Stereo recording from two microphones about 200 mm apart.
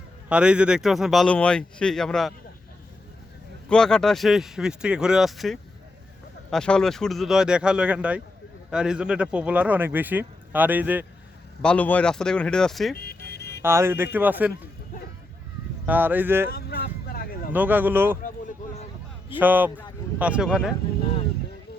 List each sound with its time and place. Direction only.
0.3 s speech: 5° right (ahead or behind)
3.7 s speech: 5° left (ahead or behind)
11.6 s speech: 5° left (ahead or behind)
13.0 s music: 50° left (ahead or behind)
13.6 s speech: 10° right (ahead or behind)
15.9 s speech: 10° right (ahead or behind)
16.5 s vehicle: 50° left (ahead or behind)
17.5 s speech: 10° right (ahead or behind)
18.2 s a sound: 40° left (ahead or behind)
19.4 s speech: 10° right (ahead or behind)